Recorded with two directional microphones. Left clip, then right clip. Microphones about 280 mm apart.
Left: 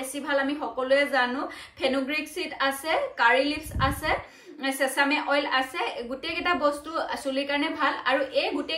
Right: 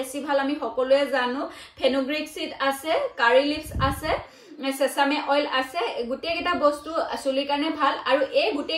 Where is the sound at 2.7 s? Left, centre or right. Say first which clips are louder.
Right 4 dB; left.